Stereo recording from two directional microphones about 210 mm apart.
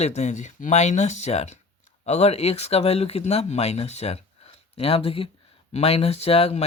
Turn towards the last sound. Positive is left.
turn(degrees=30)  # may be behind; listen again after turning